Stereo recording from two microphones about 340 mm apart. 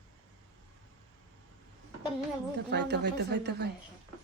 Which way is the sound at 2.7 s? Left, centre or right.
Right.